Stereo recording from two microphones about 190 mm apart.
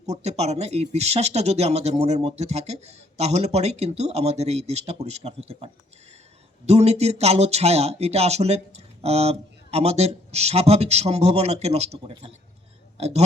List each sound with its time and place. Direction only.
0.0 s speech: 35° right (ahead or behind)